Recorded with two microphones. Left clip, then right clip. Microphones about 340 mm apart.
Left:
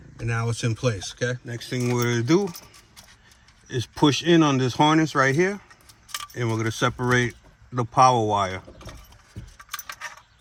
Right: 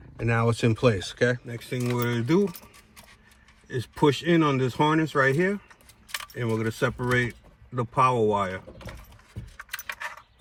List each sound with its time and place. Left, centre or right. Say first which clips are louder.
0.2 s speech: right 4 dB; centre
1.5 s speech: left 3 dB; left
3.7 s speech: left 2 dB; left